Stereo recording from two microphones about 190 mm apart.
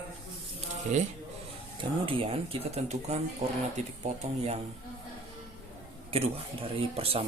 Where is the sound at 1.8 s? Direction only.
25° right (ahead or behind).